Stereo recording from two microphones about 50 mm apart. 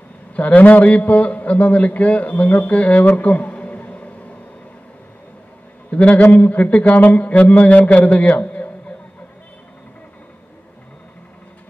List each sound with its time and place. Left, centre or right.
0.4 s a man's voice: left
5.9 s a man's voice: left
8.4 s a sound: left